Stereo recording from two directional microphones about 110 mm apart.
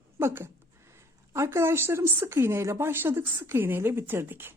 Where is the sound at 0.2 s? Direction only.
20° right (ahead or behind).